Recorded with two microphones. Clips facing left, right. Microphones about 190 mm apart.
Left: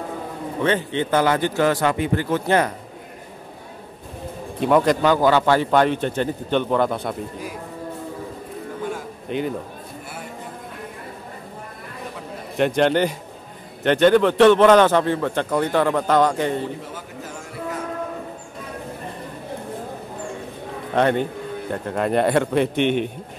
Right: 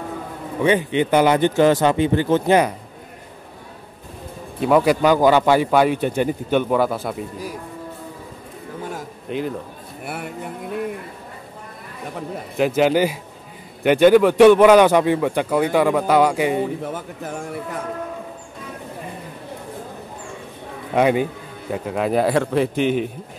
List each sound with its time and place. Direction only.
0.6 s a man's voice: 15° right (ahead or behind)
4.6 s a man's voice: 5° right (ahead or behind)
9.3 s speech: centre (ahead or behind)
10.0 s a sound: 65° right (ahead or behind)
12.5 s a man's voice: 5° right (ahead or behind)
16.8 s a man's voice: 55° right (ahead or behind)
20.9 s speech: 5° right (ahead or behind)